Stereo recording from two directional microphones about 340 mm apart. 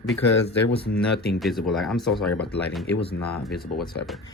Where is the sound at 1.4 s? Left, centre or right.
Centre.